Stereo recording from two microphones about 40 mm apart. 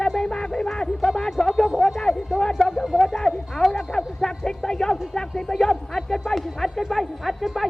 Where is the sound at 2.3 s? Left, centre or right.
Centre.